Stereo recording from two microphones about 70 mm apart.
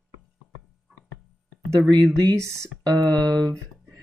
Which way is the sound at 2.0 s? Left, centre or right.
Right.